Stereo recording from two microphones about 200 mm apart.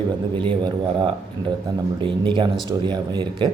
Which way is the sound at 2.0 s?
25° right (ahead or behind).